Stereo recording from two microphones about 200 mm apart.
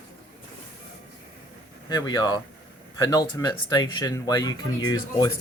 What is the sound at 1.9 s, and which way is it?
Speech, 20° left (ahead or behind).